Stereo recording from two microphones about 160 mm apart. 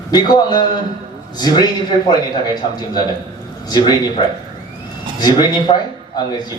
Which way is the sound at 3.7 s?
25° left (ahead or behind).